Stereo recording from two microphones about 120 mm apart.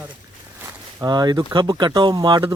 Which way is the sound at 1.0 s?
35° right (ahead or behind).